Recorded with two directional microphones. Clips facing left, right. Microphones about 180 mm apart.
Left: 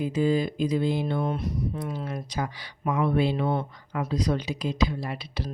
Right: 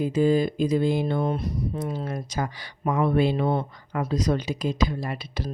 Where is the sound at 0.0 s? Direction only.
45° right (ahead or behind).